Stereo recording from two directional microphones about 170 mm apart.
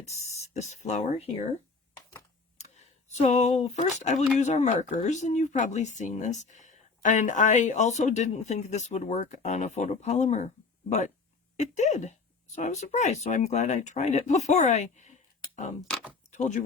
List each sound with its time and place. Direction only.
0.0 s speech: 40° left (ahead or behind)
2.6 s speech: 40° left (ahead or behind)
11.5 s speech: 45° left (ahead or behind)
15.9 s speech: 5° left (ahead or behind)
16.3 s speech: 45° left (ahead or behind)